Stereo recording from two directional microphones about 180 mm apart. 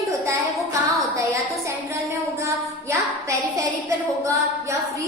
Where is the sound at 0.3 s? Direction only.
15° right (ahead or behind).